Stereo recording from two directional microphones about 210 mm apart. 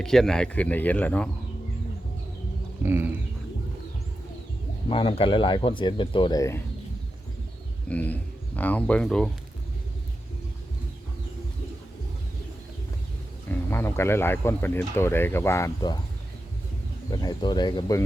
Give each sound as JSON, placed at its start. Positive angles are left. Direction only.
{"t": 0.0, "sound": "speech", "side_deg": 0}
{"t": 2.8, "sound": "bird", "side_deg": -10}
{"t": 4.9, "sound": "speech", "side_deg": 25}
{"t": 7.9, "sound": "speech", "side_deg": 5}
{"t": 13.5, "sound": "speech", "side_deg": 10}
{"t": 17.1, "sound": "speech", "side_deg": 20}